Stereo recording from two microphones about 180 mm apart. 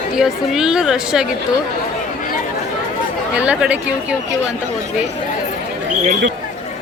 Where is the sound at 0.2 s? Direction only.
5° right (ahead or behind).